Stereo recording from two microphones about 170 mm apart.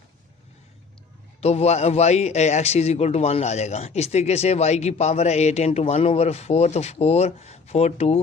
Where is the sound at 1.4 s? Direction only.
40° left (ahead or behind).